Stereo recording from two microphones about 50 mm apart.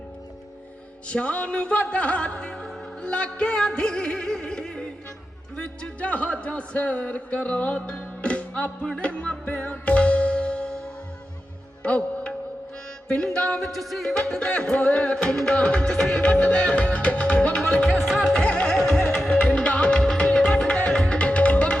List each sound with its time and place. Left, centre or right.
1.0 s music: left
11.8 s music: left
13.6 s music: centre
14.2 s music: centre
19.4 s music: left